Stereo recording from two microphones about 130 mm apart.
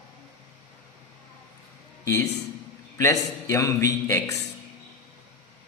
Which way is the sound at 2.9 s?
25° left (ahead or behind).